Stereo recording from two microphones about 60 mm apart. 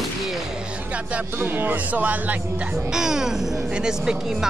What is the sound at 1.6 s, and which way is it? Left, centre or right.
Speech, right.